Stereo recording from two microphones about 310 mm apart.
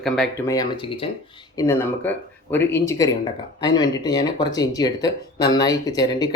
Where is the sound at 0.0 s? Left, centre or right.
Centre.